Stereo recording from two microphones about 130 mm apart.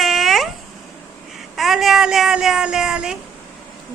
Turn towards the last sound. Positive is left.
turn(degrees=-5)  # may be behind; listen again after turning